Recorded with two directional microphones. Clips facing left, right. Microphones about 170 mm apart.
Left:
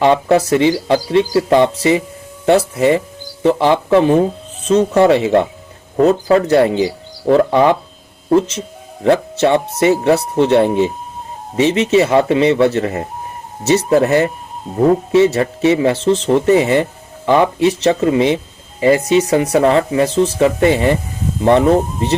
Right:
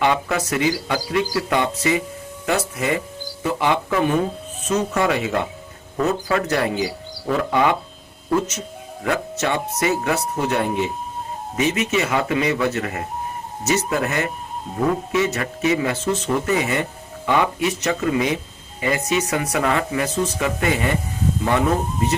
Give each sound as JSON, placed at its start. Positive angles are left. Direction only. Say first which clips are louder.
{"t": 0.0, "sound": "speech", "louder": "left 8 dB", "side_deg": 30}